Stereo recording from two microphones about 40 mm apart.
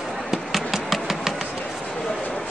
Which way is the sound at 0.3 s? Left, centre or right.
Centre.